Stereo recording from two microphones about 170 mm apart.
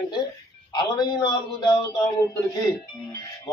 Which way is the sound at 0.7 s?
25° left (ahead or behind).